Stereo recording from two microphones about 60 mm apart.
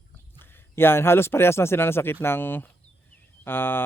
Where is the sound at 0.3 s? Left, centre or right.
Left.